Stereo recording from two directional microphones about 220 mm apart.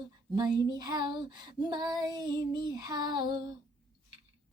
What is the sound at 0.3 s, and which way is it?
Child singing, 20° right (ahead or behind).